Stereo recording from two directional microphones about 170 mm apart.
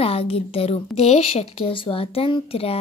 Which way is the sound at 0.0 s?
35° left (ahead or behind).